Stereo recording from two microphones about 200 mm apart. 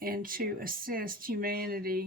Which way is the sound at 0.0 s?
45° right (ahead or behind).